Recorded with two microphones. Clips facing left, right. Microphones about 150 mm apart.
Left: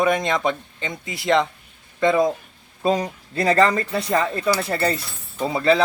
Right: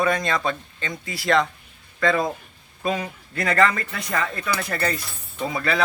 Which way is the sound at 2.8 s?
30° left (ahead or behind).